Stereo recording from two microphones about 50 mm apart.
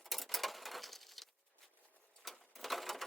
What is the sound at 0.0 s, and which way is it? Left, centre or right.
Sewing machine, centre.